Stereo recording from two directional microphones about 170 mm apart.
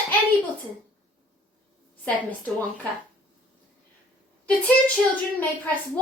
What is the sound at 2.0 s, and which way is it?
Speech, 10° left (ahead or behind).